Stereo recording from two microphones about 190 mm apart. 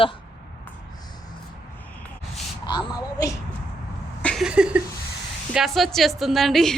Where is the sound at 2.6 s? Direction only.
20° left (ahead or behind).